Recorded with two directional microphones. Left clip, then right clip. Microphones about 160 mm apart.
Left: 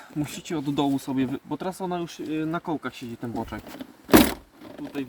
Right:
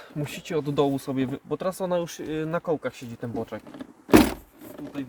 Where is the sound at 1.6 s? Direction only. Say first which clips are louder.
Right 5 dB; 60° right (ahead or behind); by 2.5 s 90° right.